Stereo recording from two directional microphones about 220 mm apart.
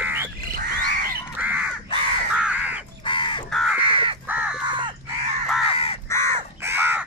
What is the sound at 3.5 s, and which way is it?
Crow, centre (ahead or behind).